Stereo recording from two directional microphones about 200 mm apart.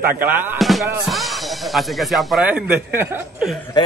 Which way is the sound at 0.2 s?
10° right (ahead or behind).